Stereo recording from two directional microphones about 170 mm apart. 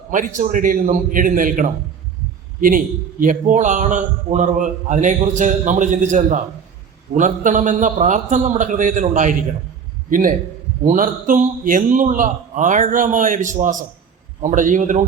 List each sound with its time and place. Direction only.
0.3 s a man's voice: 50° right (ahead or behind)